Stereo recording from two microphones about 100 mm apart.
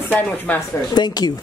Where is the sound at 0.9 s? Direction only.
45° left (ahead or behind).